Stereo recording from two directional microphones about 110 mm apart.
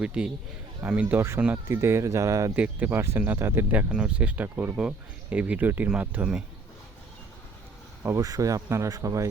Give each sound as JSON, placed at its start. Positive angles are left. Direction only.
{"t": 0.0, "sound": "speech", "side_deg": -10}
{"t": 1.6, "sound": "speech", "side_deg": -25}
{"t": 2.6, "sound": "speech", "side_deg": -15}
{"t": 8.0, "sound": "speech", "side_deg": -30}